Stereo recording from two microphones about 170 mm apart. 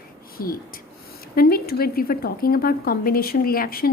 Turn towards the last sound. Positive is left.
turn(degrees=60)  # may be behind; listen again after turning